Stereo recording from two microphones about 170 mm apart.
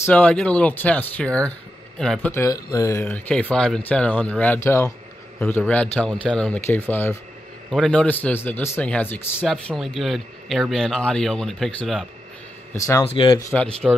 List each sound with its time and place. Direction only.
0.0 s speech: 10° left (ahead or behind)
2.3 s speech: 20° left (ahead or behind); by 12.1 s centre (ahead or behind)
12.7 s speech: 20° left (ahead or behind)
13.0 s speech: 30° left (ahead or behind)
13.4 s speech: 15° left (ahead or behind)